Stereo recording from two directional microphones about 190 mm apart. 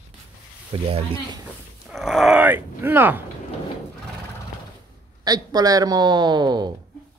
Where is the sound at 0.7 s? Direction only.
30° right (ahead or behind).